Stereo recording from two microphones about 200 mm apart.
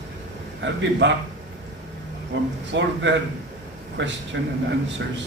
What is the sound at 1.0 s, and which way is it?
Speech, 65° right (ahead or behind).